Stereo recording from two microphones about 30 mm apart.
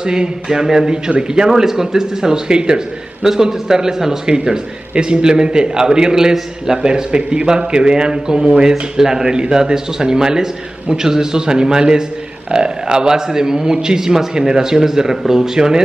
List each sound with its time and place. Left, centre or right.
0.0 s a man's voice: right
2.4 s a man's voice: right
3.3 s speech: centre
4.3 s a man's voice: right
8.9 s a man's voice: centre